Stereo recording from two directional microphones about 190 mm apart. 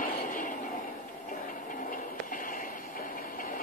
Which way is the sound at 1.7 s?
45° left (ahead or behind).